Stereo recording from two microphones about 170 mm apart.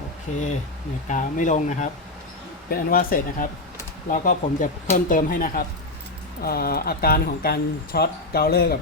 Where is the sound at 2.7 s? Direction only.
60° left (ahead or behind).